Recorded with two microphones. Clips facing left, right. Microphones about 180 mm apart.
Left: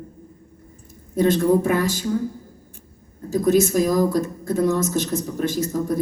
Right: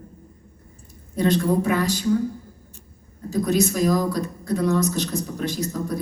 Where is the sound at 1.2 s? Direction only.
50° left (ahead or behind).